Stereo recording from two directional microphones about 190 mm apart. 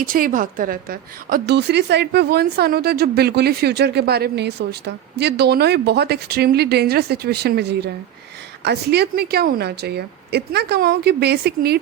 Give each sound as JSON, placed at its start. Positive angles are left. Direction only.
{"t": 0.0, "sound": "a woman's voice", "side_deg": -45}